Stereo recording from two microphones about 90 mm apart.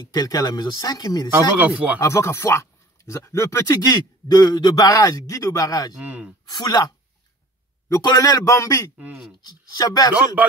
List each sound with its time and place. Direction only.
0.1 s speech: 45° left (ahead or behind)
1.3 s speech: 20° right (ahead or behind)
2.0 s speech: 35° left (ahead or behind)
5.9 s speech: 15° right (ahead or behind)
6.5 s speech: 50° left (ahead or behind)
8.2 s speech: 35° left (ahead or behind)